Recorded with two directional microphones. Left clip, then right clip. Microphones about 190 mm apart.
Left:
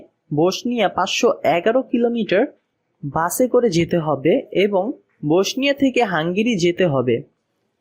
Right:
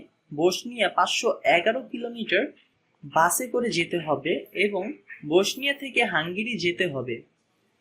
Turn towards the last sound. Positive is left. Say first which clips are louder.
# left 10 dB
turn(degrees=55)  # may be behind; listen again after turning